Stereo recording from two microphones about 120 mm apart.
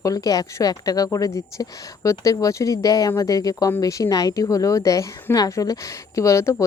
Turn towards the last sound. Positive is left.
turn(degrees=25)  # may be behind; listen again after turning